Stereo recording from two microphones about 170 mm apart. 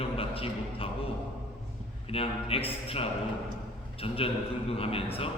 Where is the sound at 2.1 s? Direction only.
35° left (ahead or behind).